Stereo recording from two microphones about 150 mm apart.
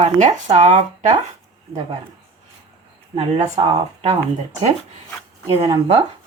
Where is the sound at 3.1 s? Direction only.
40° right (ahead or behind).